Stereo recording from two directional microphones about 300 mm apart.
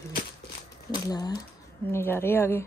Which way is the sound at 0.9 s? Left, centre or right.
Centre.